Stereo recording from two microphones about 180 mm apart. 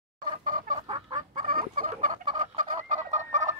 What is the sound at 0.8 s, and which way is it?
Fowl, 25° right (ahead or behind).